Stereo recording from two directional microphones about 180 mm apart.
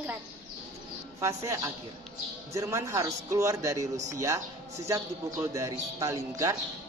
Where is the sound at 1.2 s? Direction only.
15° right (ahead or behind).